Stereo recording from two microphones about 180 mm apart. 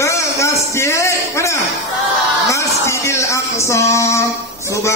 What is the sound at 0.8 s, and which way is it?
Speech, 15° left (ahead or behind).